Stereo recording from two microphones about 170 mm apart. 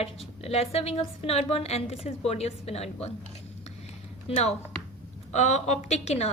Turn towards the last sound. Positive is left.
turn(degrees=40)  # may be behind; listen again after turning